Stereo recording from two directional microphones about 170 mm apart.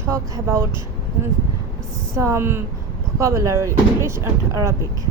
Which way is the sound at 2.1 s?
15° right (ahead or behind).